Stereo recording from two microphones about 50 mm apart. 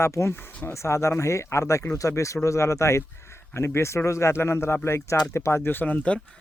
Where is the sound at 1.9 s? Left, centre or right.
Left.